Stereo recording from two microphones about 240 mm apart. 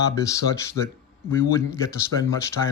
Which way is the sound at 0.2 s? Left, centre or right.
Centre.